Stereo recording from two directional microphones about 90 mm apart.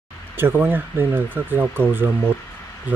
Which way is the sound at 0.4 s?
25° right (ahead or behind).